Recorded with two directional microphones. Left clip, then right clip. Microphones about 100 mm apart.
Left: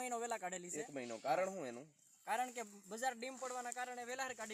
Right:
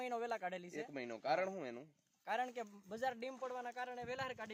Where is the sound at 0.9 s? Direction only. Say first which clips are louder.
Right 1 dB; 25° left (ahead or behind).